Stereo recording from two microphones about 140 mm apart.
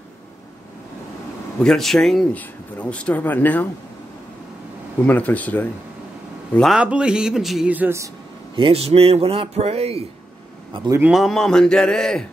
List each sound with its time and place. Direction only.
1.6 s speech: 5° left (ahead or behind)
5.0 s speech: 10° left (ahead or behind)
6.7 s speech: 5° right (ahead or behind)
8.5 s speech: 40° right (ahead or behind)
11.1 s speech: centre (ahead or behind)